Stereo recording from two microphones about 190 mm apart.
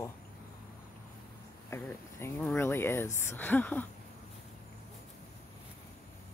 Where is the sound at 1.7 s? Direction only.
15° left (ahead or behind).